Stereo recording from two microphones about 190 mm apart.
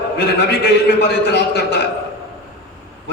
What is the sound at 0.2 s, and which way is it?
A man's voice, 60° left (ahead or behind).